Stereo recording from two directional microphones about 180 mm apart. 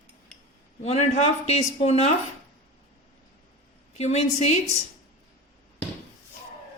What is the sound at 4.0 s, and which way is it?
Speech, 35° left (ahead or behind).